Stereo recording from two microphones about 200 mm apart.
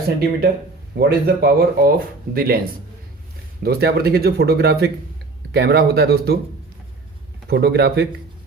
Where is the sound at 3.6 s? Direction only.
50° right (ahead or behind).